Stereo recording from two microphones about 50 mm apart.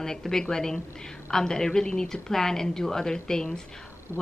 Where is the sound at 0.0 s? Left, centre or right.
Centre.